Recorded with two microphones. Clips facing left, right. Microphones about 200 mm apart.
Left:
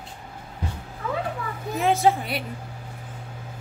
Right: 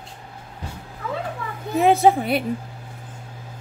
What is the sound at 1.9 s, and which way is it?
Speech, 55° right (ahead or behind).